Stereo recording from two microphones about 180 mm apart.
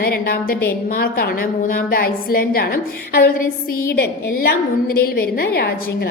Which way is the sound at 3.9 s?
60° left (ahead or behind).